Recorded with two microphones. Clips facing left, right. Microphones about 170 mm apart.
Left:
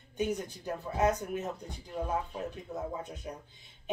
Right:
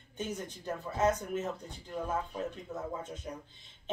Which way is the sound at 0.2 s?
15° left (ahead or behind).